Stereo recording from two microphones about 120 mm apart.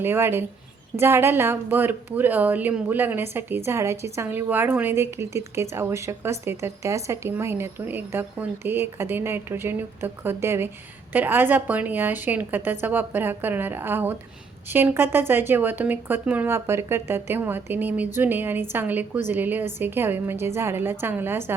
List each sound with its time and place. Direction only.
0.0 s speech: 20° right (ahead or behind)